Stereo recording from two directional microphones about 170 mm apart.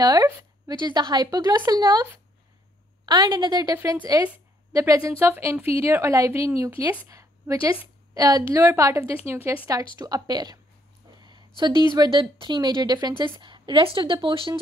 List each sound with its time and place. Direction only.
0.0 s a woman's voice: 25° right (ahead or behind)
3.1 s a woman's voice: 25° right (ahead or behind)
11.2 s a sound: 25° right (ahead or behind)
11.9 s a woman's voice: 25° right (ahead or behind)